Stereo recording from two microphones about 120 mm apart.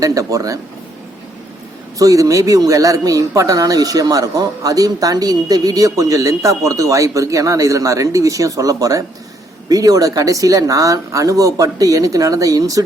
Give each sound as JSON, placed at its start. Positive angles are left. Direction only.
{"t": 0.0, "sound": "speech", "side_deg": -30}
{"t": 2.0, "sound": "speech", "side_deg": -30}